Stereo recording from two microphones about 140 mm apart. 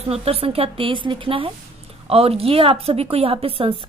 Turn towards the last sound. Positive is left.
turn(degrees=-40)  # may be behind; listen again after turning